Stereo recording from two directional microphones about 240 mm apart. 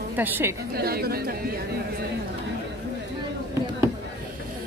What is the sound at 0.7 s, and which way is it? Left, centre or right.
Speech, right.